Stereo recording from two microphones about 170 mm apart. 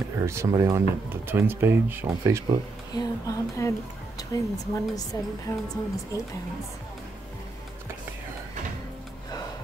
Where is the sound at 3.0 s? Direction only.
20° left (ahead or behind).